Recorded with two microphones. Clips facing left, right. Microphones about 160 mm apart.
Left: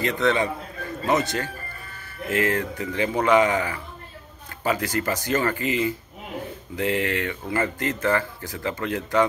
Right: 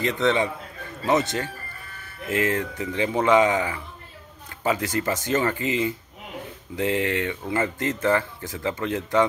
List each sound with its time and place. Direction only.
0.0 s speech: 20° right (ahead or behind)